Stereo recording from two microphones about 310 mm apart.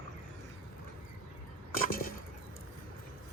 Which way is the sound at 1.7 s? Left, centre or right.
Left.